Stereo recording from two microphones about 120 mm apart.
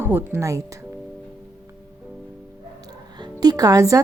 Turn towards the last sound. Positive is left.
turn(degrees=-30)  # may be behind; listen again after turning